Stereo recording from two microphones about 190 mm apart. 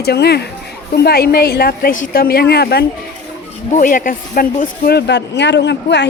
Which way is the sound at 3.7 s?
45° left (ahead or behind).